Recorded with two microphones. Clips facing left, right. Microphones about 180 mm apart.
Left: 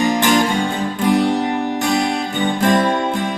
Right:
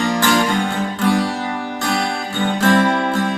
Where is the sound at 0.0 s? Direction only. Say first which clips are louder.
Left 2 dB; 20° left (ahead or behind).